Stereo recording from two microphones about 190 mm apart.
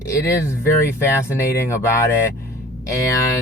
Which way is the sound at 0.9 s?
15° left (ahead or behind).